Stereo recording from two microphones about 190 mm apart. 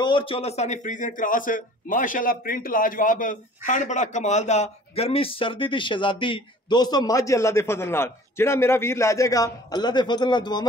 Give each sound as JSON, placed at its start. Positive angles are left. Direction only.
{"t": 0.0, "sound": "a man's voice", "side_deg": 25}